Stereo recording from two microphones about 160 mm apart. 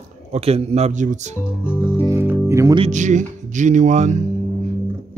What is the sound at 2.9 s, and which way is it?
Music, 50° right (ahead or behind).